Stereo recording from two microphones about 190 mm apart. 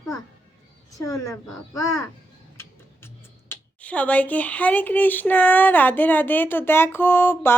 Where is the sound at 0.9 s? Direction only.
15° left (ahead or behind).